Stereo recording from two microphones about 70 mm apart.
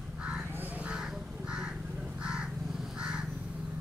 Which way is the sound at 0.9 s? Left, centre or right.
Centre.